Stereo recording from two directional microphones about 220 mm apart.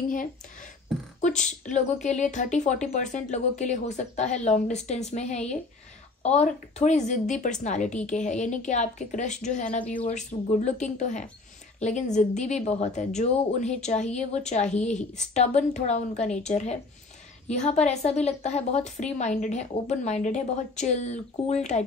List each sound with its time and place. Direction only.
1.2 s a woman's voice: 35° left (ahead or behind)